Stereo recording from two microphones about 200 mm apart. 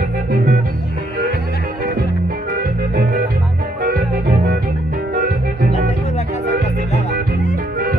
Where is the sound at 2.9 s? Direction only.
50° right (ahead or behind).